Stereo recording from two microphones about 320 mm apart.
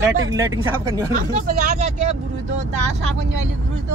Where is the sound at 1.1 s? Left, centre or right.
Right.